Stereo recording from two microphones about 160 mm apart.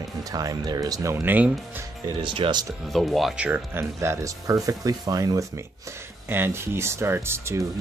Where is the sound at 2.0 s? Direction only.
30° right (ahead or behind).